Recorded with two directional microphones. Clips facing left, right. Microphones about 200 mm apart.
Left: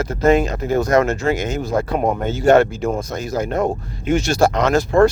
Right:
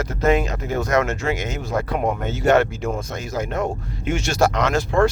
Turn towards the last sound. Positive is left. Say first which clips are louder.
# left 4 dB
turn(degrees=35)  # may be behind; listen again after turning